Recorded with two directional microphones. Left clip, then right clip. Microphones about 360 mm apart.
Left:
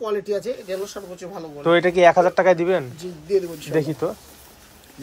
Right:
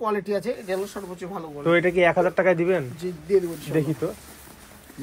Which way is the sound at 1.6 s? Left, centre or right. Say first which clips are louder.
Left 5 dB; centre.